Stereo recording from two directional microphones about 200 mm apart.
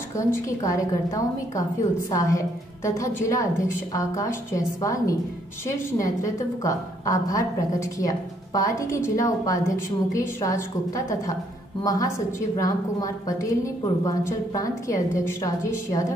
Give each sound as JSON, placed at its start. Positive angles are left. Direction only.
{"t": 0.1, "sound": "a woman's voice", "side_deg": 15}